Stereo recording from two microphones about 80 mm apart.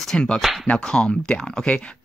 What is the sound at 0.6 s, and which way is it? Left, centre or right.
Speech, centre.